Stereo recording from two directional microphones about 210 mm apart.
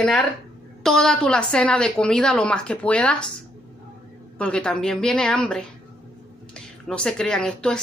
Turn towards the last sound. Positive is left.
turn(degrees=5)  # may be behind; listen again after turning